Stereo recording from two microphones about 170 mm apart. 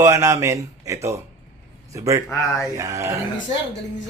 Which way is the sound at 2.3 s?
15° left (ahead or behind).